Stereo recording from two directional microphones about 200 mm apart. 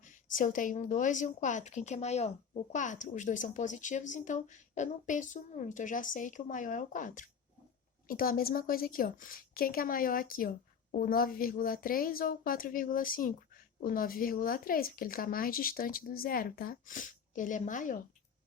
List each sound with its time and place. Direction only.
0.0 s a woman's voice: 40° left (ahead or behind)